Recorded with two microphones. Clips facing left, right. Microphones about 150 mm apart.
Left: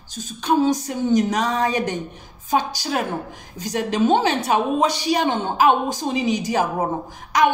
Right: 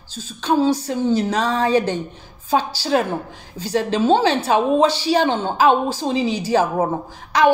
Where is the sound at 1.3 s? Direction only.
10° left (ahead or behind).